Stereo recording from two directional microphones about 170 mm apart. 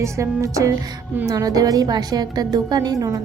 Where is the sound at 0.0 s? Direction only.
15° right (ahead or behind).